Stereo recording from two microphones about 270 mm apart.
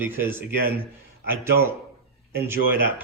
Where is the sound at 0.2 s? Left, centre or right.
Centre.